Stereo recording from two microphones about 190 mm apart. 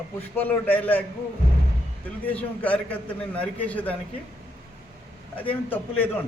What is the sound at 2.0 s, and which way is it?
A man's voice, 10° left (ahead or behind).